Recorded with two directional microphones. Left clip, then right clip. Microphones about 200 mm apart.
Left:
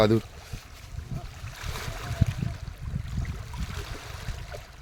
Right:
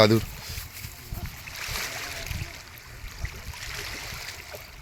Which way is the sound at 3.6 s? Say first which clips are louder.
Right 6 dB; 40° left (ahead or behind).